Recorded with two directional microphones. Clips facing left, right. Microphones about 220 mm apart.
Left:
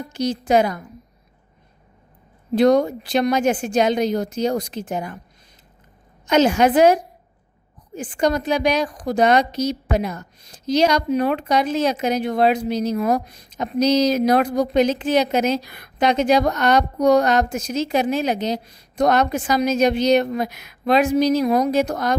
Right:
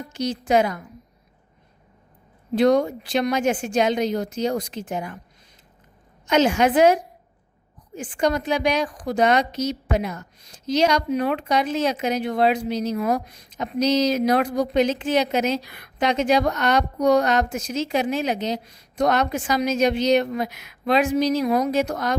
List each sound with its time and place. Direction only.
0.1 s a woman's voice: 35° left (ahead or behind)
2.6 s a woman's voice: 40° left (ahead or behind)
6.2 s a woman's voice: 40° left (ahead or behind)